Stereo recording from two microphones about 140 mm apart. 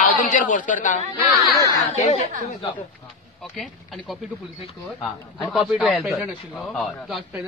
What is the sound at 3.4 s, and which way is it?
Speech, centre (ahead or behind).